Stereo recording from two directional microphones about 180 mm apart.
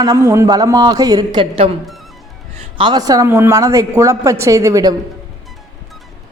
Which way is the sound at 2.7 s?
25° right (ahead or behind).